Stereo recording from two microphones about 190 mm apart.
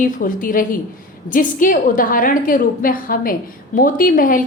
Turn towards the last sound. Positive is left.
turn(degrees=45)  # may be behind; listen again after turning